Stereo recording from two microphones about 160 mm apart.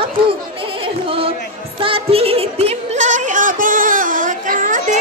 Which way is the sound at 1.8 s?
35° right (ahead or behind).